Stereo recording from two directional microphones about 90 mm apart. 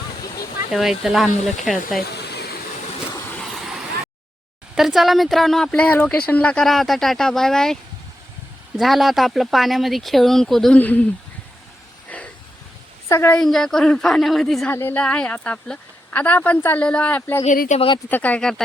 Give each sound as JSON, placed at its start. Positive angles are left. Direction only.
{"t": 0.7, "sound": "speech", "side_deg": -5}
{"t": 3.4, "sound": "vehicle", "side_deg": -5}
{"t": 4.7, "sound": "speech", "side_deg": -5}
{"t": 6.7, "sound": "speech", "side_deg": 0}
{"t": 8.8, "sound": "speech", "side_deg": 0}
{"t": 10.8, "sound": "speech", "side_deg": 20}
{"t": 12.1, "sound": "vehicle", "side_deg": 15}
{"t": 13.1, "sound": "a woman's voice", "side_deg": 35}
{"t": 13.4, "sound": "speech", "side_deg": 5}
{"t": 14.7, "sound": "a woman's voice", "side_deg": 25}
{"t": 14.9, "sound": "speech", "side_deg": 10}
{"t": 17.7, "sound": "speech", "side_deg": 65}
{"t": 18.1, "sound": "speech", "side_deg": 15}